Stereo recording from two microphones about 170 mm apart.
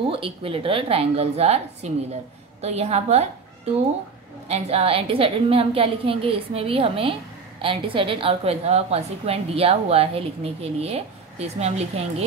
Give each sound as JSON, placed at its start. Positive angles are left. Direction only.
{"t": 0.1, "sound": "a woman's voice", "side_deg": -30}